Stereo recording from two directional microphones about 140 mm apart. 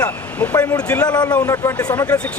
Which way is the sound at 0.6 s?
15° left (ahead or behind).